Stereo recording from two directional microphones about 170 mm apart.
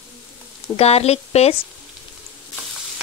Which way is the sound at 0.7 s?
35° left (ahead or behind).